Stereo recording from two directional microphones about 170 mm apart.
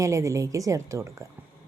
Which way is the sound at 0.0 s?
20° right (ahead or behind).